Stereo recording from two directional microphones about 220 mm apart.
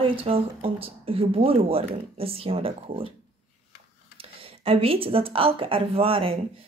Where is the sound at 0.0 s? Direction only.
25° right (ahead or behind).